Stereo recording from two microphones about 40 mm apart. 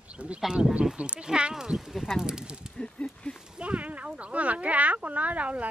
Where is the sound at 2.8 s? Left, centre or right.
Left.